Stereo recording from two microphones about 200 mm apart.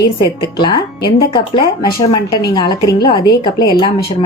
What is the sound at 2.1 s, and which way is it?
Speech, 20° left (ahead or behind).